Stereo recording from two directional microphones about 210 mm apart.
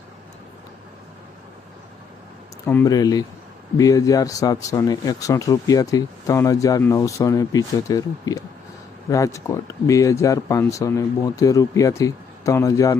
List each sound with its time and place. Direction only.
2.6 s speech: 15° left (ahead or behind)